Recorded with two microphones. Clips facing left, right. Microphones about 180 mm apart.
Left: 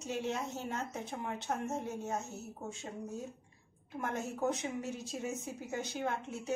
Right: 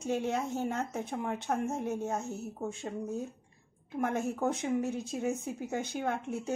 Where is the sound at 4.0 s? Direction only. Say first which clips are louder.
Right 5 dB; 55° right (ahead or behind).